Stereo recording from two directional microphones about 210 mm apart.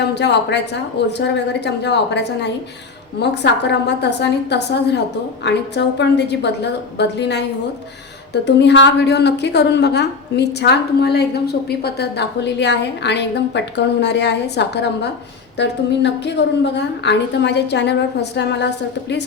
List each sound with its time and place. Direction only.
0.0 s a woman's voice: 55° left (ahead or behind)